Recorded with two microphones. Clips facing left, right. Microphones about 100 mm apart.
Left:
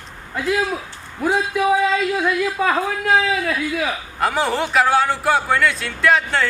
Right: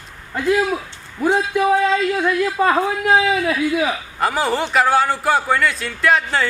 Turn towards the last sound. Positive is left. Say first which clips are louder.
# even
turn(degrees=0)  # may be behind; listen again after turning